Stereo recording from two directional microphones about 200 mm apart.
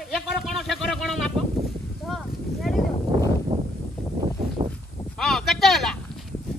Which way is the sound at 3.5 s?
25° right (ahead or behind).